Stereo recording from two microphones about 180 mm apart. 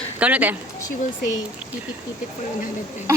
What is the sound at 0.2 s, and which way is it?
Speech, 10° right (ahead or behind).